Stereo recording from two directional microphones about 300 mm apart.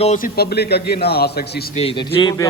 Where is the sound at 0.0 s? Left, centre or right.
Left.